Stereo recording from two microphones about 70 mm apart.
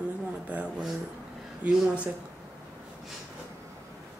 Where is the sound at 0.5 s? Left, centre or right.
Centre.